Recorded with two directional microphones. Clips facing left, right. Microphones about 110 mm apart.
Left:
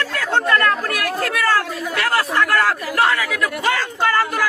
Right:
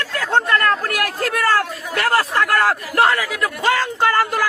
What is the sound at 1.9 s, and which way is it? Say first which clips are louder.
Speech: right 2 dB; 30° right (ahead or behind).